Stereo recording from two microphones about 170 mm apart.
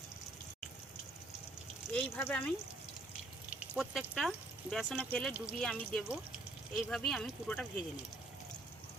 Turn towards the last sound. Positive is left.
turn(degrees=10)  # may be behind; listen again after turning